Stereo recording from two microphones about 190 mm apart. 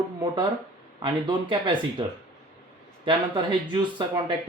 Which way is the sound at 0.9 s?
25° right (ahead or behind).